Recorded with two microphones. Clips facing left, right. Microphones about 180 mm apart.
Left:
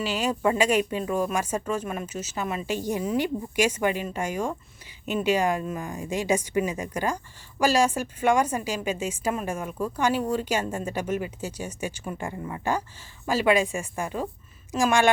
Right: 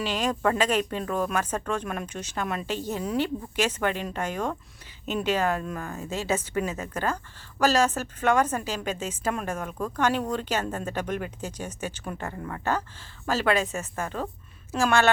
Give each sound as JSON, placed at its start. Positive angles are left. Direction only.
{"t": 0.0, "sound": "a woman's voice", "side_deg": 10}